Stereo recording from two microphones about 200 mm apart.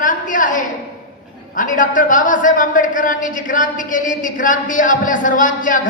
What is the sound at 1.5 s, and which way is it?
A man's voice, 40° left (ahead or behind).